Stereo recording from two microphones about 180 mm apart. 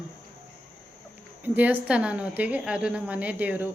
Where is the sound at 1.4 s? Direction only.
10° right (ahead or behind).